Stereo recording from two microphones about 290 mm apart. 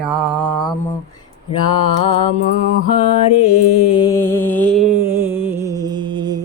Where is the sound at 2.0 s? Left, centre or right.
Centre.